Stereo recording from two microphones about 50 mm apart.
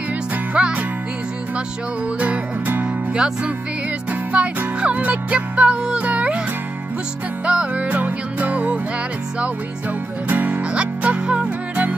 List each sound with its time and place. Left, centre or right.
0.6 s music: right
2.1 s music: right
4.3 s music: right
7.4 s music: right
10.2 s music: right
10.6 s music: right